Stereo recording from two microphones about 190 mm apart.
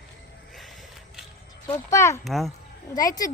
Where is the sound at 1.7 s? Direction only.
15° left (ahead or behind).